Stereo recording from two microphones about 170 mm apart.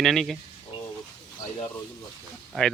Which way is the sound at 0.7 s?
30° left (ahead or behind).